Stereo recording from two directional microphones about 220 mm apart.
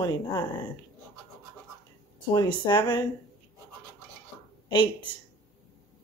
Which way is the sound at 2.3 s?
20° left (ahead or behind).